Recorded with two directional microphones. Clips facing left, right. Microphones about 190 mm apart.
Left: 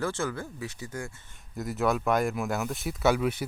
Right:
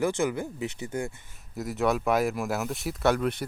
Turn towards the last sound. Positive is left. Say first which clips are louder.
# even
turn(degrees=5)  # may be behind; listen again after turning